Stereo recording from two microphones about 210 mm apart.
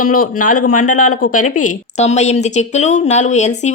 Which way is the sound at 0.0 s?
40° left (ahead or behind).